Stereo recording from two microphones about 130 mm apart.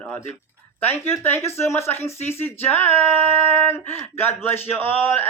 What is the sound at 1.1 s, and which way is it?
Speech, 20° left (ahead or behind).